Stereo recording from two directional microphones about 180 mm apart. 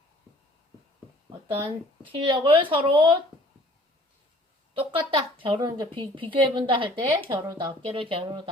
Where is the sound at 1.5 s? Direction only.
30° right (ahead or behind).